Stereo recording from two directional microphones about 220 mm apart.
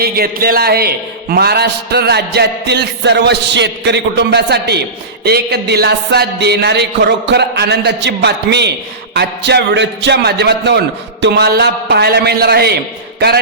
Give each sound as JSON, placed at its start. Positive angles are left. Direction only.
{"t": 0.0, "sound": "a man's voice", "side_deg": -45}